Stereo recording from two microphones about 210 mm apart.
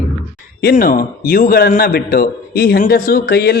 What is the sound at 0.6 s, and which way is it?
A man's voice, 45° left (ahead or behind).